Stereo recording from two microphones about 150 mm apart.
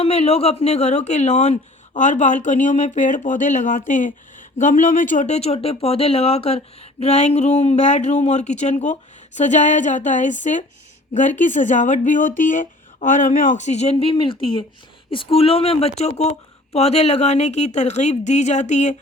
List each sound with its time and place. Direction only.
0.0 s speech: 45° left (ahead or behind)